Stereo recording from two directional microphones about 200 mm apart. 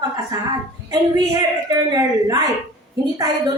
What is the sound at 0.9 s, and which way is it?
A man's voice, 20° right (ahead or behind).